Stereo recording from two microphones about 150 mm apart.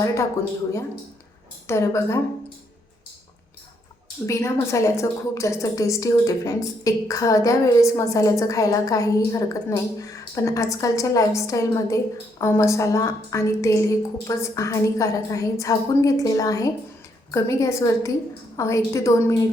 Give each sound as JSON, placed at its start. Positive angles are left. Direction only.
{"t": 0.0, "sound": "a woman's voice", "side_deg": 20}
{"t": 1.6, "sound": "a woman's voice", "side_deg": 20}
{"t": 4.3, "sound": "a woman's voice", "side_deg": 20}